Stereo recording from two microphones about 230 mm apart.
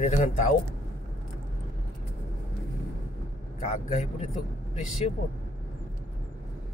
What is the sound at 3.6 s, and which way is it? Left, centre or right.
Speech, left.